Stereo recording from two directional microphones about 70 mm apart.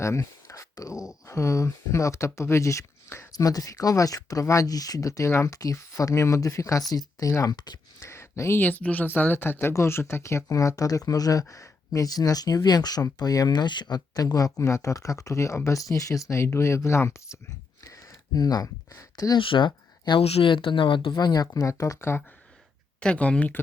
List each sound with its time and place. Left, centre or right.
0.0 s speech: left
3.3 s speech: left
7.5 s speech: left
7.9 s a sound: left
8.6 s speech: left
14.7 s speech: left
17.8 s a sound: left
18.4 s speech: left
20.4 s speech: left
21.4 s speech: left
23.0 s speech: centre